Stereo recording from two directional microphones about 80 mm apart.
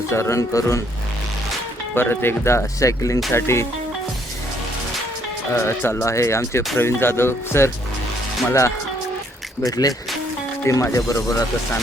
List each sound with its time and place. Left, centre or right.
0.1 s speech: left
2.0 s speech: left
5.5 s speech: left
9.6 s speech: left